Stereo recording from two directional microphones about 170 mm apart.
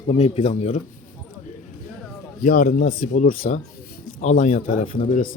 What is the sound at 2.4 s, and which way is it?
Speech, 55° left (ahead or behind).